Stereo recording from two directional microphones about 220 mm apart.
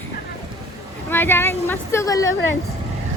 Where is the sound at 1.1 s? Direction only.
10° left (ahead or behind).